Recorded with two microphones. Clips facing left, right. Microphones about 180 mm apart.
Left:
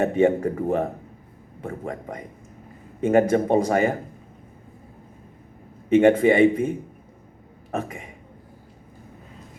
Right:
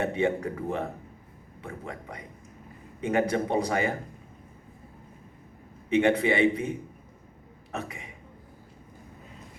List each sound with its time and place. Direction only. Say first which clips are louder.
0.0 s a man's voice: left 7 dB; 45° left (ahead or behind)
5.9 s a man's voice: left 7 dB; 45° left (ahead or behind)